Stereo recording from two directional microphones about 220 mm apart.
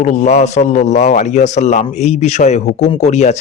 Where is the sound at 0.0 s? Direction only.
35° left (ahead or behind).